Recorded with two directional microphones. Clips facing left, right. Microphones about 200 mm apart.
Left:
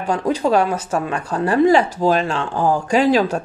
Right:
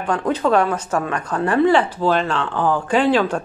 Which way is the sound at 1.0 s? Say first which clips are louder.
Left 1 dB; 30° left (ahead or behind).